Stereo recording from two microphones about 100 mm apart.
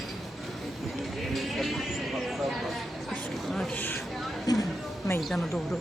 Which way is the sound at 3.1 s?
5° left (ahead or behind).